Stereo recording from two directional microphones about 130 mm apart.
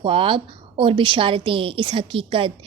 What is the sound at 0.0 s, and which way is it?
A woman's voice, 45° right (ahead or behind).